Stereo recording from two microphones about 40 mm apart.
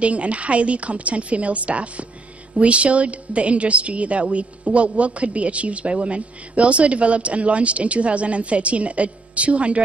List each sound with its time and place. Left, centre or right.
0.0 s a woman's voice: right